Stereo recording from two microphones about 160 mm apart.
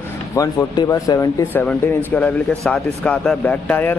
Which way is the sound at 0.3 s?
15° left (ahead or behind).